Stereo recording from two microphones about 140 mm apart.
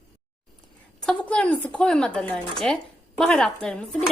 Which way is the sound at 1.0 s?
10° left (ahead or behind).